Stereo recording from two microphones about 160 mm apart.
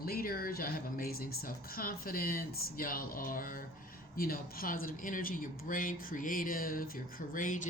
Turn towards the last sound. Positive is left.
turn(degrees=55)  # may be behind; listen again after turning